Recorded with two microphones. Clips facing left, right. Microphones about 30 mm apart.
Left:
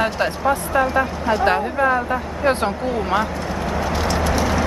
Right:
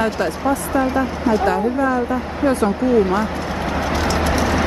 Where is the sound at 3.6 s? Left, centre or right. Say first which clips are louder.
Right 2 dB; centre.